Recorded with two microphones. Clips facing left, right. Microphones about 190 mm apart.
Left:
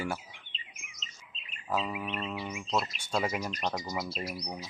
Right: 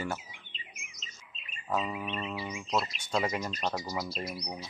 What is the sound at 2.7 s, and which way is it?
Speech, centre (ahead or behind).